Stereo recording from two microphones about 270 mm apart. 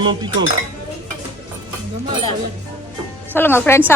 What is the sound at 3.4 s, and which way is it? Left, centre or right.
Speech, centre.